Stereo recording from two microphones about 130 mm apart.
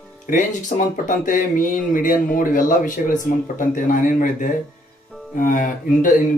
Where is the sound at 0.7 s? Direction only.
80° left.